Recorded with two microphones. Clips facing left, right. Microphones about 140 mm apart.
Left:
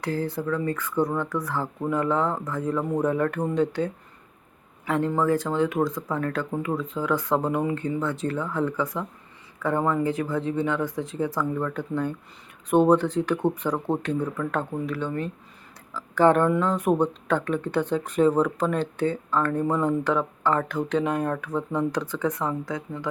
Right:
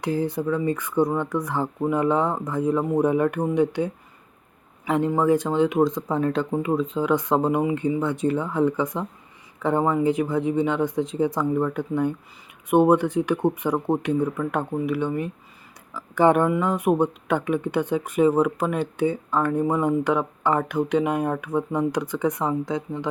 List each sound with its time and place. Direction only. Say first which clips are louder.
0.0 s speech: right 3 dB; 20° right (ahead or behind)